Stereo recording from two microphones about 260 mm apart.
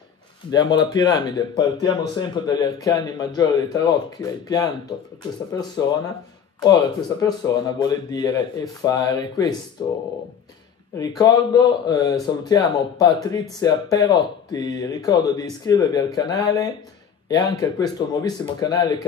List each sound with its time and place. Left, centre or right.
0.5 s speech: centre
11.0 s speech: centre